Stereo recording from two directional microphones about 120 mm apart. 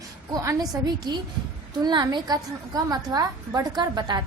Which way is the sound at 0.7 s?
35° right (ahead or behind).